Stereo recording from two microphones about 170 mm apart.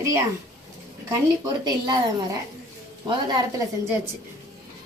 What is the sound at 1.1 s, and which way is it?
A woman's voice, 25° right (ahead or behind).